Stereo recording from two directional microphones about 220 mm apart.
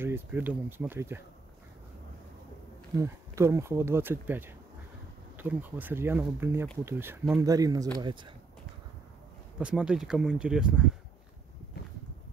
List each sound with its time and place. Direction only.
0.0 s speech: 10° right (ahead or behind)
3.0 s speech: 15° right (ahead or behind)
9.6 s speech: 5° right (ahead or behind)